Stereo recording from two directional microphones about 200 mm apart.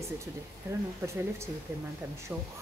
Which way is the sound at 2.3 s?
5° right (ahead or behind).